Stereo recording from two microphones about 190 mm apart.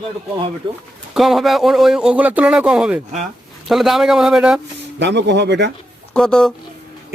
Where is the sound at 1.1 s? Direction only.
Centre (ahead or behind).